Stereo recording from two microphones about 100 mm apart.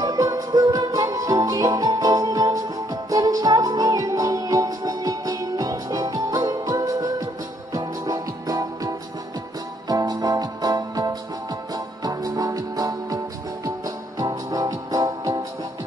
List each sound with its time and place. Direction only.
0.0 s music: 40° right (ahead or behind)